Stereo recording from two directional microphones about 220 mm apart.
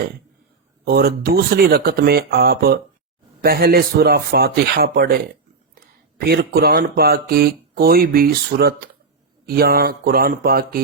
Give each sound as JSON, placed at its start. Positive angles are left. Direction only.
{"t": 0.9, "sound": "speech", "side_deg": -45}